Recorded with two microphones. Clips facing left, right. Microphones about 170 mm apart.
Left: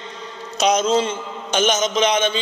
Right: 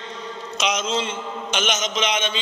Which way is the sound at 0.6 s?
35° left (ahead or behind).